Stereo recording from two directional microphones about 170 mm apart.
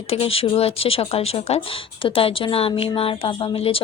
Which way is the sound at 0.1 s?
35° left (ahead or behind).